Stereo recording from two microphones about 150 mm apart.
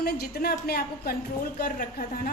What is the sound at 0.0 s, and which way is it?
A woman's voice, 90° left.